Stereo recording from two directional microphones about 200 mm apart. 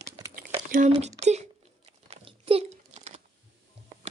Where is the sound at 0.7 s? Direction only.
40° right (ahead or behind).